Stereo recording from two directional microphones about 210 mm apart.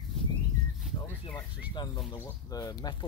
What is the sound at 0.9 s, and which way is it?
Speech, 15° left (ahead or behind).